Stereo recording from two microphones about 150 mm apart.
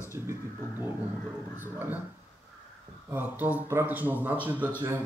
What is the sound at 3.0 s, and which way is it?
Speech, 10° right (ahead or behind).